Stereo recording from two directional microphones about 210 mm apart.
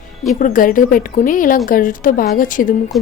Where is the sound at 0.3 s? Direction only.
40° left (ahead or behind).